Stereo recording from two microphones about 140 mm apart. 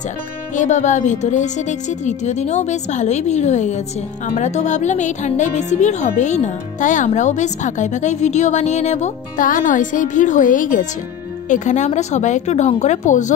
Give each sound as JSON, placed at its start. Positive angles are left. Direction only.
{"t": 0.6, "sound": "a woman's voice", "side_deg": 60}
{"t": 11.4, "sound": "a woman's voice", "side_deg": 60}